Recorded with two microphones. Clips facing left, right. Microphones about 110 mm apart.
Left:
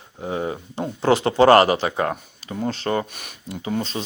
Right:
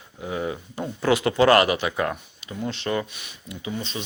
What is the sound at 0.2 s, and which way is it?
Speech, 30° left (ahead or behind).